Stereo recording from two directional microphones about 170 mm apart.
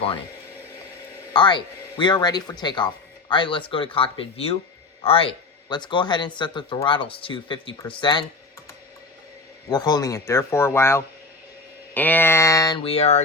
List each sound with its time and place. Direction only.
1.3 s speech: 25° left (ahead or behind)
9.6 s speech: 25° left (ahead or behind)
12.8 s speech: 35° left (ahead or behind)